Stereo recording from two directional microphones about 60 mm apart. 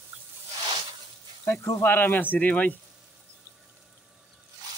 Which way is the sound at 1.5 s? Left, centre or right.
Left.